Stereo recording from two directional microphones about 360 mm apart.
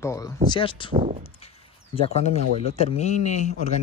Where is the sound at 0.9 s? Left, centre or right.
Centre.